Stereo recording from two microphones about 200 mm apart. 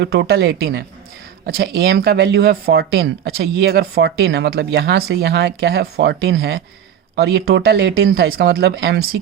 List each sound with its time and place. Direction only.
0.0 s speech: 60° right (ahead or behind)